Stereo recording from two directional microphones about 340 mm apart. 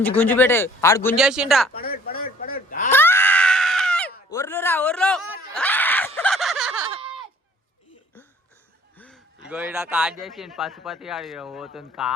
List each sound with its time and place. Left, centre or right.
0.2 s speech: centre
1.1 s speech: centre
1.7 s a sound: left
2.9 s screaming: centre
4.3 s a sound: centre
9.0 s speech: centre